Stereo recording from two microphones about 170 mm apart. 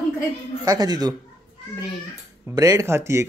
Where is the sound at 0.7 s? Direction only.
25° right (ahead or behind).